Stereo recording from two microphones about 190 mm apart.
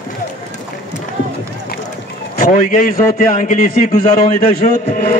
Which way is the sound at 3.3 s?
40° left (ahead or behind).